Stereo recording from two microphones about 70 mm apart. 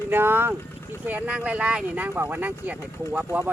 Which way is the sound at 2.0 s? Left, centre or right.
Right.